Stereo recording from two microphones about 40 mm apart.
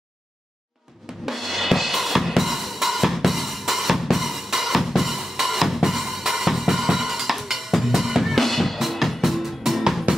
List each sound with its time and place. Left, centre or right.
1.2 s drum kit: centre
10.1 s music: right